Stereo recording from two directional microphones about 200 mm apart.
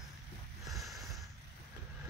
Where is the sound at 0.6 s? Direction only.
Centre (ahead or behind).